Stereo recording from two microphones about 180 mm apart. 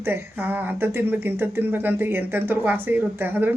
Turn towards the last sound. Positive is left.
turn(degrees=-10)  # may be behind; listen again after turning